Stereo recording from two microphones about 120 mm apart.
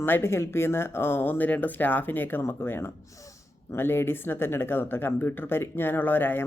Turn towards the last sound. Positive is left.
turn(degrees=15)  # may be behind; listen again after turning